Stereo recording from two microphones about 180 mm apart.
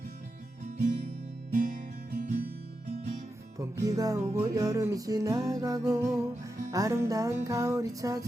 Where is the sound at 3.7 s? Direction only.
20° right (ahead or behind).